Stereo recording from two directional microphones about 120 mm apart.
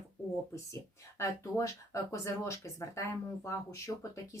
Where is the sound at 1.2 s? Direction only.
25° left (ahead or behind).